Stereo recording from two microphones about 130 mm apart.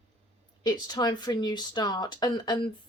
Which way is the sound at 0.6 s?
30° left (ahead or behind).